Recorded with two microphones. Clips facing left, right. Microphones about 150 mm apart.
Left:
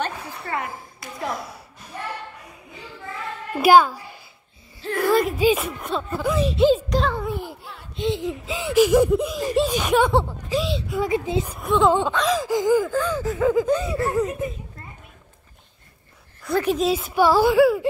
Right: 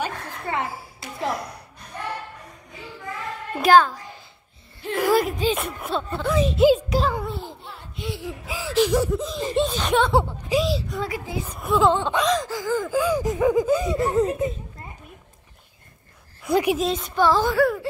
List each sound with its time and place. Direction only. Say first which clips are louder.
0.1 s a sound: right 1 dB; 5° left (ahead or behind)
3.5 s a woman's voice: left 2 dB; 10° left (ahead or behind)
4.8 s a sound: even; 10° right (ahead or behind)
5.4 s speech: left 4 dB; 5° left (ahead or behind)
7.2 s a sound: left 3 dB; 10° left (ahead or behind)
7.9 s a woman's voice: left 8 dB; 20° left (ahead or behind); by 11.0 s centre (ahead or behind)
11.1 s speech: left 7 dB; 20° left (ahead or behind)
11.4 s speech: right 2 dB; centre (ahead or behind)
12.5 s a woman's voice: left 6 dB; 20° left (ahead or behind)
12.9 s speech: right 2 dB; 10° right (ahead or behind)
16.4 s speech: right 1 dB; 15° right (ahead or behind)
16.7 s a woman's voice: left 3 dB; 5° left (ahead or behind)